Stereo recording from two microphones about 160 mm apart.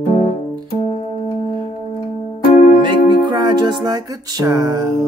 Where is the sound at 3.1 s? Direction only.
30° right (ahead or behind).